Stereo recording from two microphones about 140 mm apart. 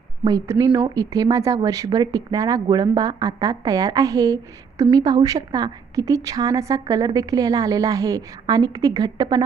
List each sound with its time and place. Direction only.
0.3 s a woman's voice: 25° right (ahead or behind)